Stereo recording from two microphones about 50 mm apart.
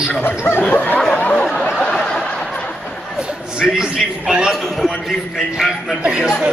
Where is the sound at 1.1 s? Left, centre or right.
Left.